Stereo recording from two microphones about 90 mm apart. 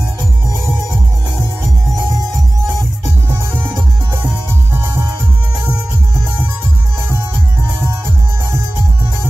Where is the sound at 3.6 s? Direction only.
30° right (ahead or behind).